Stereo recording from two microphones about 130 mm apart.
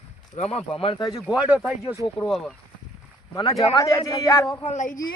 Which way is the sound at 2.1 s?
5° left (ahead or behind).